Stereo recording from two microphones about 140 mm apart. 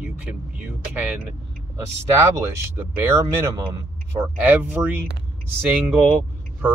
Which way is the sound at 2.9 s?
15° right (ahead or behind).